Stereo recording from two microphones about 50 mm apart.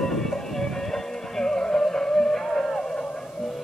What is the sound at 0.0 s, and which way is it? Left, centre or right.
Music, centre.